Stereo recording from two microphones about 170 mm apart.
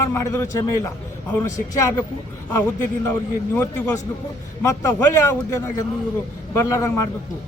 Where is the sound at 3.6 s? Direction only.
20° left (ahead or behind).